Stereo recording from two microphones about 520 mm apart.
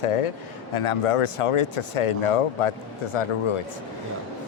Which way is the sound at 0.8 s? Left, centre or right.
Left.